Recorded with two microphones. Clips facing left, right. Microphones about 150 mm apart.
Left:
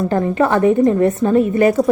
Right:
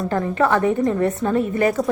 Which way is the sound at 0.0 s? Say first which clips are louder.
Left 4 dB; 25° left (ahead or behind).